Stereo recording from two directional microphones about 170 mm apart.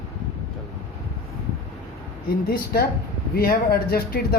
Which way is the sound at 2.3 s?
60° left (ahead or behind).